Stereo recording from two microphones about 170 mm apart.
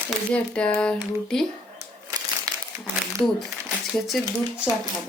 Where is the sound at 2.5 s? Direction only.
20° right (ahead or behind).